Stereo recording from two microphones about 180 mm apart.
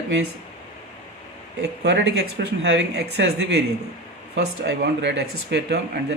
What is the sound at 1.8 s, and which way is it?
Speech, 70° right (ahead or behind).